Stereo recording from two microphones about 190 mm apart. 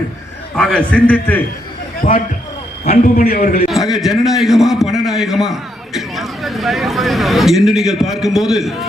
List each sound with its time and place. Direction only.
0.5 s a man's voice: 5° left (ahead or behind)
2.0 s a man's voice: 45° left (ahead or behind)
3.7 s a man's voice: centre (ahead or behind)